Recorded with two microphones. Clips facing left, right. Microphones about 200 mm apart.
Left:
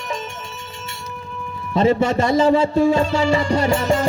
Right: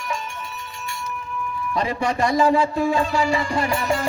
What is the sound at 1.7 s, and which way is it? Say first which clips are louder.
Music: left 8 dB; 25° left (ahead or behind).